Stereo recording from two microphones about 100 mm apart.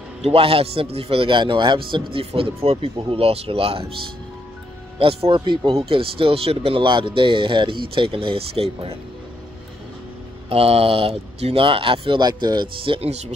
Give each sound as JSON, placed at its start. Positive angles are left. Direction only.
{"t": 0.2, "sound": "a man's voice", "side_deg": -80}
{"t": 4.9, "sound": "speech", "side_deg": -70}
{"t": 5.8, "sound": "speech", "side_deg": -65}
{"t": 10.5, "sound": "a man's voice", "side_deg": -80}
{"t": 12.2, "sound": "speech", "side_deg": -45}